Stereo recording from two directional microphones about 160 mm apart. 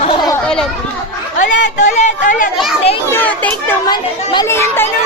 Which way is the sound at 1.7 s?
50° left (ahead or behind).